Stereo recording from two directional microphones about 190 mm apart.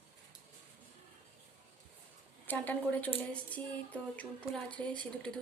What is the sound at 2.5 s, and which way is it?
A woman's voice, 10° left (ahead or behind).